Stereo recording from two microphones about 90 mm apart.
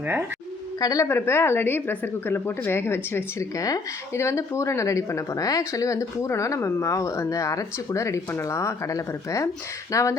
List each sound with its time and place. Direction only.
0.8 s speech: 45° left (ahead or behind)
1.0 s a woman's voice: 25° left (ahead or behind)